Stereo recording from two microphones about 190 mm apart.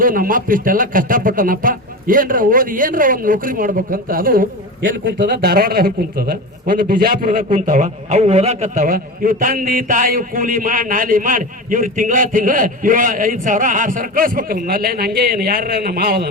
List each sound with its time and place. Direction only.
0.0 s a man's voice: 45° right (ahead or behind)
5.0 s a man's voice: 65° right (ahead or behind)